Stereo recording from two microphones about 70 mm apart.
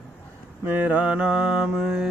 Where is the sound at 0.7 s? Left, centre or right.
Right; by 2.1 s centre.